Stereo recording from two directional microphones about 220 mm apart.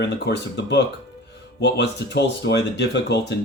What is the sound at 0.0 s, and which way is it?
Speech, 50° left (ahead or behind).